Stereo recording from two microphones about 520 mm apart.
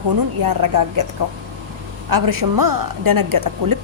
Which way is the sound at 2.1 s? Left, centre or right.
Right.